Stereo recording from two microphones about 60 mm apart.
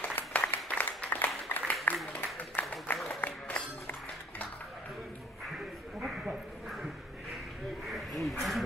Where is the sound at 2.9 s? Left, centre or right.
Left.